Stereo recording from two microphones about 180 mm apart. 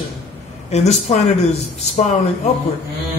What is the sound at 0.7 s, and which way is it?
A man's voice, 40° left (ahead or behind).